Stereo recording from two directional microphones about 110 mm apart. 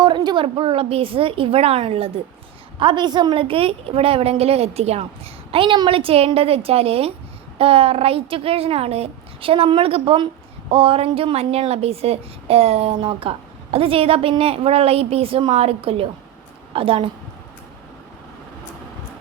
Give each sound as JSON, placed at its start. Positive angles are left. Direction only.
{"t": 0.0, "sound": "a woman's voice", "side_deg": -40}
{"t": 2.7, "sound": "a woman's voice", "side_deg": -45}